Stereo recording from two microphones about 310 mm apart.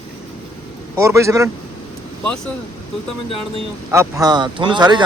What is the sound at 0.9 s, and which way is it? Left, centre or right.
Speech, centre.